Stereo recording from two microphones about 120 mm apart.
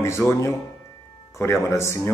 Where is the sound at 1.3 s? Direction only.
25° left (ahead or behind).